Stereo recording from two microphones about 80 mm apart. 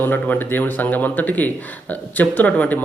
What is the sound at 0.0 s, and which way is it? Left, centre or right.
Speech, left.